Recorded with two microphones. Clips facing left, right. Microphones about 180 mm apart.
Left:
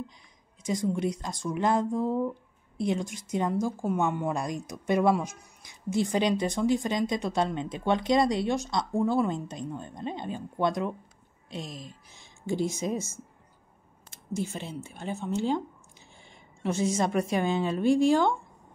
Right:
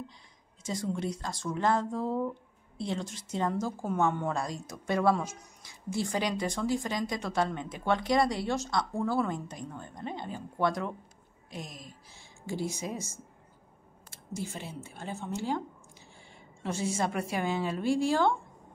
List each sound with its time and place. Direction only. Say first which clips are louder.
0.7 s speech: left 5 dB; 15° left (ahead or behind)
14.1 s speech: left 5 dB; 20° left (ahead or behind)
16.6 s speech: left 4 dB; 20° left (ahead or behind)